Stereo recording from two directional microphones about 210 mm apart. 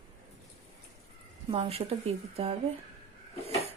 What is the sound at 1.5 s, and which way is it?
A woman's voice, 30° right (ahead or behind).